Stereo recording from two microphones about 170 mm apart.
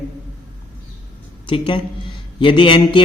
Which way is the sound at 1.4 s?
30° left (ahead or behind).